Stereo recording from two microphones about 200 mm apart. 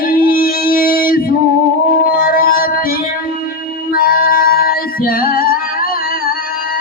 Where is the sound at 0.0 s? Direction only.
45° left (ahead or behind).